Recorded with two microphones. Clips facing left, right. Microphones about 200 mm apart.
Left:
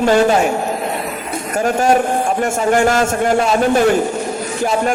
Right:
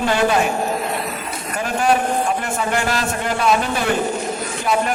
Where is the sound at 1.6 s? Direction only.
45° left (ahead or behind).